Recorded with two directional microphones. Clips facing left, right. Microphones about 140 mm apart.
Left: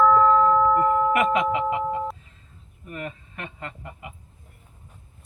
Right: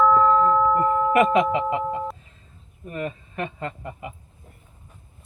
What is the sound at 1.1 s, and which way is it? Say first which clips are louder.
Speech: right 3 dB; 30° right (ahead or behind).